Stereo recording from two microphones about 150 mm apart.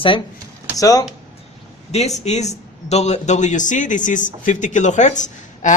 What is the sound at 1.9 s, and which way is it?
A man's voice, 50° left (ahead or behind).